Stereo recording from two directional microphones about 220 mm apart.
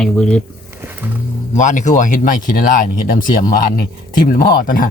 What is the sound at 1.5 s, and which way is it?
Speech, 35° left (ahead or behind).